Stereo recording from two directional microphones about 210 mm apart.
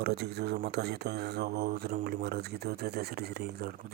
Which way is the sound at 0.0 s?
50° right (ahead or behind).